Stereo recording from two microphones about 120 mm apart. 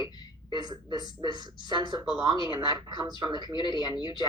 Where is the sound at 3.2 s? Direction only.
35° right (ahead or behind).